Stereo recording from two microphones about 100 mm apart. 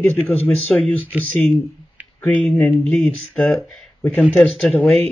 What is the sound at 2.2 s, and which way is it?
Speech, 10° left (ahead or behind).